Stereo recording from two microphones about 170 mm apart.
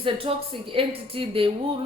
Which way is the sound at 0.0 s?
30° right (ahead or behind).